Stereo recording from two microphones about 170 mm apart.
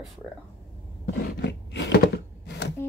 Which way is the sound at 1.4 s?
90° left.